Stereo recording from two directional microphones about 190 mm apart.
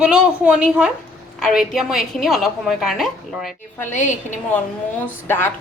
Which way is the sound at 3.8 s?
40° left (ahead or behind).